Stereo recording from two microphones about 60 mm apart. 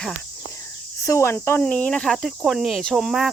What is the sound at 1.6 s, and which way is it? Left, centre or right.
Cricket, left.